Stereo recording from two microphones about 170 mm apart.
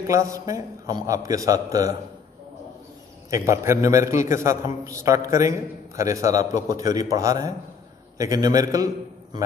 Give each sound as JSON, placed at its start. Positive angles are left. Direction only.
{"t": 0.0, "sound": "a man's voice", "side_deg": -20}
{"t": 3.3, "sound": "a man's voice", "side_deg": -15}